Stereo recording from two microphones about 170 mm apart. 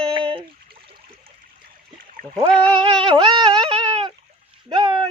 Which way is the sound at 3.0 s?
25° right (ahead or behind).